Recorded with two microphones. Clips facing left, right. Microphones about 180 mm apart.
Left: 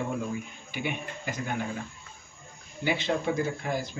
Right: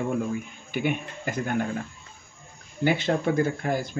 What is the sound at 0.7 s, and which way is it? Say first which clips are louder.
Speech: right 6 dB; 50° right (ahead or behind).